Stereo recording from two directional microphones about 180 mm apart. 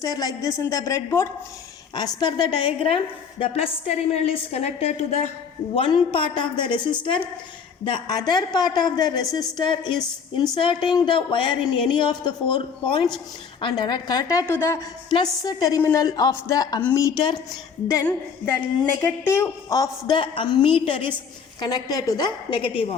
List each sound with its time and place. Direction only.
0.0 s a woman's voice: 20° left (ahead or behind)
17.8 s a woman's voice: 15° left (ahead or behind); by 23.0 s 30° left (ahead or behind)